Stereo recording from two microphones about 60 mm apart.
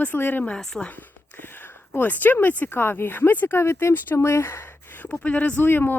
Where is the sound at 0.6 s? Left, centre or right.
Centre.